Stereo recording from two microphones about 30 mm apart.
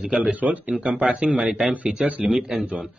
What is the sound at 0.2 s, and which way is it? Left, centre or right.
Speech, right.